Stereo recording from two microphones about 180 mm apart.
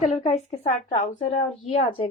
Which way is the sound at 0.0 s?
35° left (ahead or behind).